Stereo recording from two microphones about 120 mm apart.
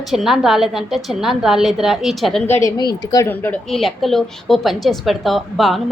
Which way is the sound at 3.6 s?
Centre (ahead or behind).